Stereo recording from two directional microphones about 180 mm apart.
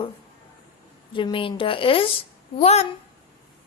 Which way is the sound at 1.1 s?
30° left (ahead or behind).